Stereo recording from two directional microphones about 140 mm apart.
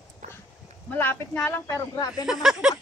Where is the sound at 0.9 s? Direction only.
15° left (ahead or behind).